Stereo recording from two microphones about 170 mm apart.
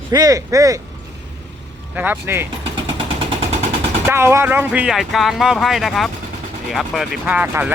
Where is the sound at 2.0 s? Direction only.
10° right (ahead or behind).